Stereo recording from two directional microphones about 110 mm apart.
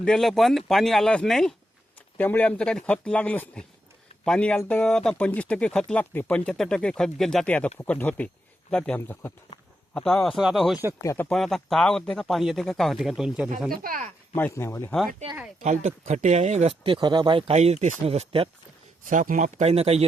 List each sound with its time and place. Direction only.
0.0 s speech: 5° left (ahead or behind)
2.1 s speech: 15° left (ahead or behind)
9.9 s speech: 5° left (ahead or behind)
11.0 s speech: 25° left (ahead or behind)
11.3 s speech: 5° left (ahead or behind)
14.5 s speech: 25° left (ahead or behind)
15.6 s speech: 90° right
16.8 s speech: 45° right (ahead or behind)
17.5 s speech: 90° right; by 18.4 s 60° right (ahead or behind)
19.5 s speech: 75° right (ahead or behind)